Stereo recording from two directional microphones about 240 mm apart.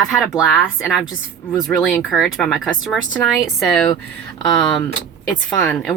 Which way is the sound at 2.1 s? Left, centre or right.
Centre.